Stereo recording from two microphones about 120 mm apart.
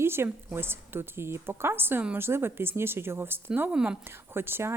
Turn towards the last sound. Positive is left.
turn(degrees=-20)  # may be behind; listen again after turning